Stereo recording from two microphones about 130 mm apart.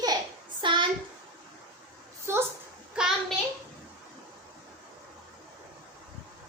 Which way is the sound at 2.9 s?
5° right (ahead or behind).